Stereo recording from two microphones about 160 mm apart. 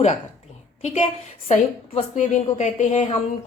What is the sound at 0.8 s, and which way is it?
A woman's voice, 45° left (ahead or behind).